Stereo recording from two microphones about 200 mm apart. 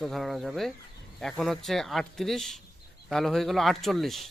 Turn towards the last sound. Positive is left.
turn(degrees=0)  # may be behind; listen again after turning